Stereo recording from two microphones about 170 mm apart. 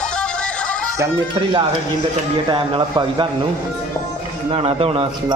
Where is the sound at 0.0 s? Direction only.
5° left (ahead or behind).